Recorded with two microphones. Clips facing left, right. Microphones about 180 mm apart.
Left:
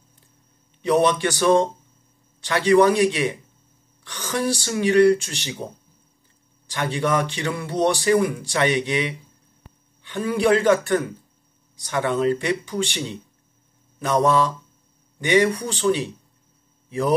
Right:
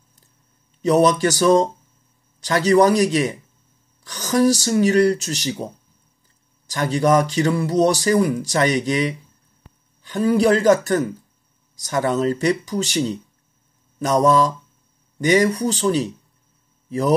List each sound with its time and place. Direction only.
0.8 s speech: 40° right (ahead or behind)
6.7 s speech: 40° right (ahead or behind)